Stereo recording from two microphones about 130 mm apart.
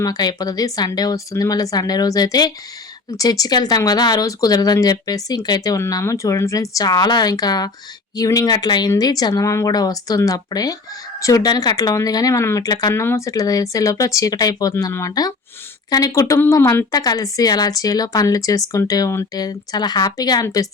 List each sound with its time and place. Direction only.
0.0 s speech: 30° left (ahead or behind)
12.9 s speech: 20° left (ahead or behind)